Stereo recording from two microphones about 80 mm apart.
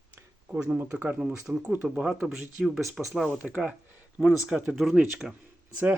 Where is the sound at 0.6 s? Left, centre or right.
Right.